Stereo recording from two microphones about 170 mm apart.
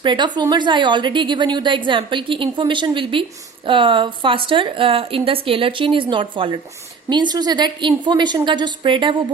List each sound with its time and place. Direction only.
0.0 s a woman's voice: 25° right (ahead or behind)